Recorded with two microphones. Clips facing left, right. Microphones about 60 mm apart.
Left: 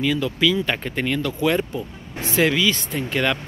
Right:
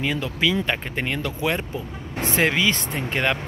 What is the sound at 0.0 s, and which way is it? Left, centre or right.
Speech, right.